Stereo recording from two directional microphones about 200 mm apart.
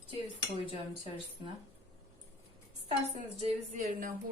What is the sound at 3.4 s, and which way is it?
Speech, 40° right (ahead or behind).